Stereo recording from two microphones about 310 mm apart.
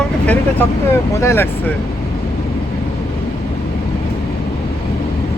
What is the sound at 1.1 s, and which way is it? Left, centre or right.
Speech, centre.